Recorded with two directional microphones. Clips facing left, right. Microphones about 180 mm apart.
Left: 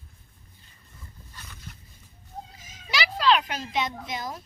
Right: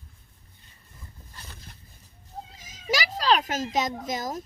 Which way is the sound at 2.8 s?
45° right (ahead or behind).